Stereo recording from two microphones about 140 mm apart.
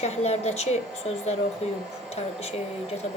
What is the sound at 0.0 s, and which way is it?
A woman's voice, 50° left (ahead or behind).